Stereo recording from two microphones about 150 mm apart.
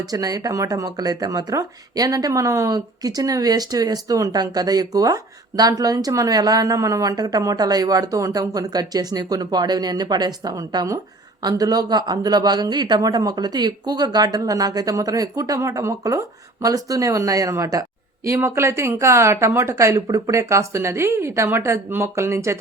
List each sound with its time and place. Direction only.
0.0 s speech: 25° right (ahead or behind)